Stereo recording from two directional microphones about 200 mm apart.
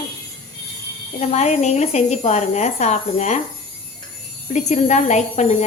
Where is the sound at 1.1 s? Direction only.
35° left (ahead or behind).